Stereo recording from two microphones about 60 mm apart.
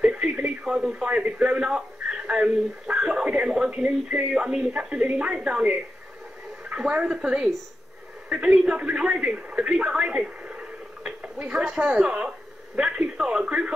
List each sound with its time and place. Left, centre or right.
0.0 s radio: centre
0.7 s a sound: centre
1.0 s a man's voice: right